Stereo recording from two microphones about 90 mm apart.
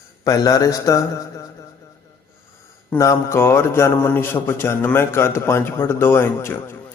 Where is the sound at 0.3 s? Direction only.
45° left (ahead or behind).